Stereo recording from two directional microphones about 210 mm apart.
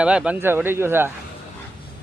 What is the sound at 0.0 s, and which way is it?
Speech, 5° right (ahead or behind).